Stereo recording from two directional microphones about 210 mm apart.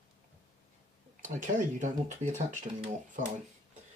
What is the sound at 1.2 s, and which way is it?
Speech, 35° right (ahead or behind).